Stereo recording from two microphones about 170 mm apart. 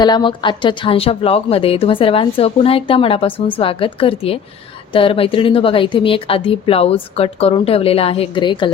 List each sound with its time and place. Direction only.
0.0 s a woman's voice: 25° left (ahead or behind)